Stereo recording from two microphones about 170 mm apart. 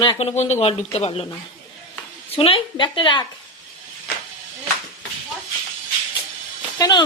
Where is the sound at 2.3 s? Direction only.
35° left (ahead or behind).